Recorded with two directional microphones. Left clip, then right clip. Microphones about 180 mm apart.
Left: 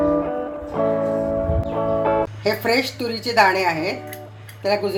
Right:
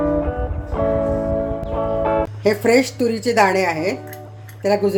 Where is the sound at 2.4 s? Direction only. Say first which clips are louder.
Right 7 dB; 50° right (ahead or behind).